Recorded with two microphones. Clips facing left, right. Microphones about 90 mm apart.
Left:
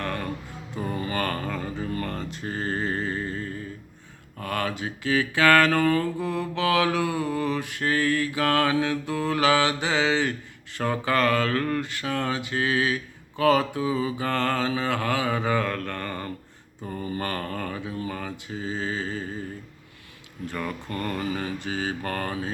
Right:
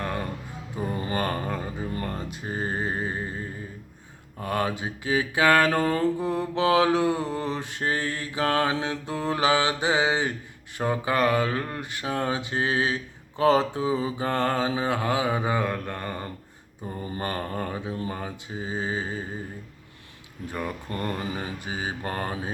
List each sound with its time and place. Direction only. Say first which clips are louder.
0.0 s a sound: even; 15° right (ahead or behind)
4.4 s mantra: right 1 dB; 25° right (ahead or behind)
20.5 s mantra: even; 20° right (ahead or behind)